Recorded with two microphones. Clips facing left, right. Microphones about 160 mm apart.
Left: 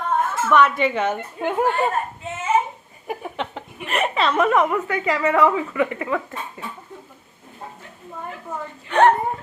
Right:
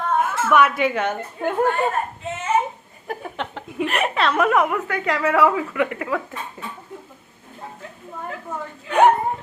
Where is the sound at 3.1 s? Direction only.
Centre (ahead or behind).